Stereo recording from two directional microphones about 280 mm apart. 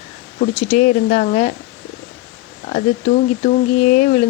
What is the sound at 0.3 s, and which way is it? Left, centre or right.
Speech, left.